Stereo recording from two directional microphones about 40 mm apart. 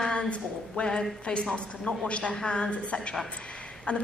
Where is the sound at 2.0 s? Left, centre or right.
Left.